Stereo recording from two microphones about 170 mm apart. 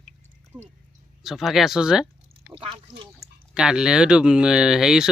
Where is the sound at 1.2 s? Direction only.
Centre (ahead or behind).